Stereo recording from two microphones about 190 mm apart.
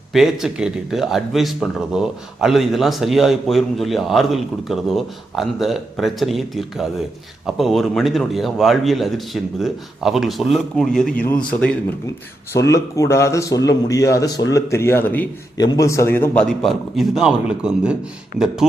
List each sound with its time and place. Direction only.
0.1 s a man's voice: centre (ahead or behind)
15.5 s a man's voice: 20° left (ahead or behind); by 18.6 s 5° right (ahead or behind)